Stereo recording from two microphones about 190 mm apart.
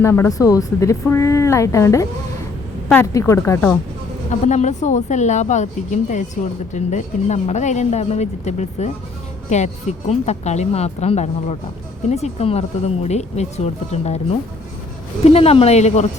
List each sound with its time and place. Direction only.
0.0 s speech: 15° left (ahead or behind)
4.3 s speech: 40° left (ahead or behind)